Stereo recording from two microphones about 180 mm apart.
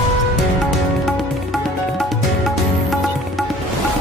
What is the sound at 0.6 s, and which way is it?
Music, centre (ahead or behind).